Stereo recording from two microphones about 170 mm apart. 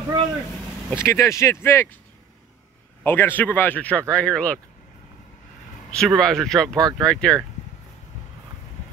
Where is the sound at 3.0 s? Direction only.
10° left (ahead or behind).